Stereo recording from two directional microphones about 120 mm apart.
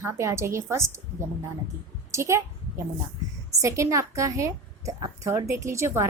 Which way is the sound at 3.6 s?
25° right (ahead or behind).